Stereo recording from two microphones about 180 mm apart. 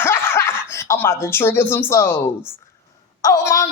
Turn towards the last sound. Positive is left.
turn(degrees=15)  # may be behind; listen again after turning